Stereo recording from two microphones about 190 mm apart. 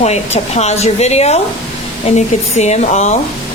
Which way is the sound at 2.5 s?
35° left (ahead or behind).